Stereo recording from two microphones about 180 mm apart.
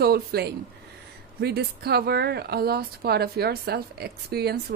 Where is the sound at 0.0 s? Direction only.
60° right (ahead or behind).